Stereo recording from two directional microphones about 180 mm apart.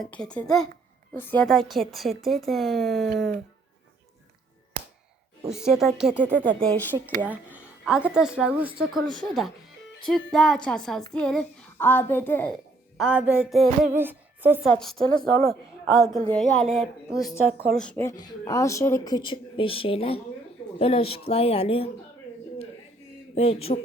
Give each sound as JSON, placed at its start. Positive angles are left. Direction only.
{"t": 0.0, "sound": "speech", "side_deg": 5}
{"t": 5.5, "sound": "speech", "side_deg": -5}
{"t": 6.3, "sound": "a child's voice", "side_deg": 5}
{"t": 7.2, "sound": "a child's voice", "side_deg": -10}
{"t": 13.0, "sound": "speech", "side_deg": -5}
{"t": 13.9, "sound": "music", "side_deg": -10}
{"t": 14.6, "sound": "a woman's voice", "side_deg": 0}
{"t": 23.3, "sound": "a woman's voice", "side_deg": 35}